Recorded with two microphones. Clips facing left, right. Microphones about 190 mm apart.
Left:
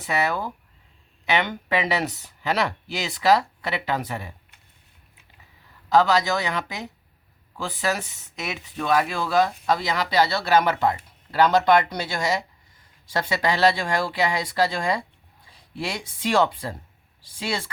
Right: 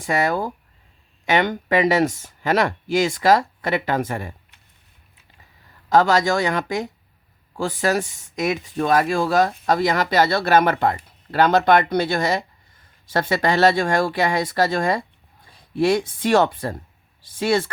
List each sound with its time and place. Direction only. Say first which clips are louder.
0.0 s speech: right 4 dB; 45° right (ahead or behind)
5.9 s speech: right 3 dB; 50° right (ahead or behind)